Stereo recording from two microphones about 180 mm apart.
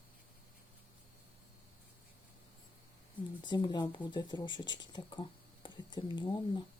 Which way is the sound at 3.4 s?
25° left (ahead or behind).